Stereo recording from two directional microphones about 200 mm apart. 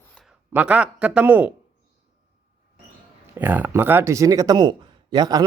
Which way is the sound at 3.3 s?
10° right (ahead or behind).